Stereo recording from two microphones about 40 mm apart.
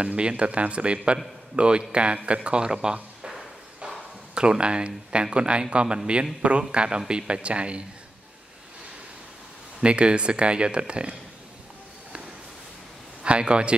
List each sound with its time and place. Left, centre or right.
0.0 s a man's voice: right
4.4 s a man's voice: right
9.8 s a man's voice: right
13.2 s a man's voice: right